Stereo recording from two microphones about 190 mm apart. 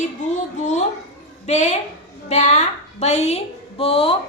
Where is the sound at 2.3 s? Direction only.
35° left (ahead or behind).